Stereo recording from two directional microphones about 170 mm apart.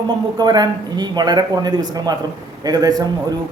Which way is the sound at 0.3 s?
25° right (ahead or behind).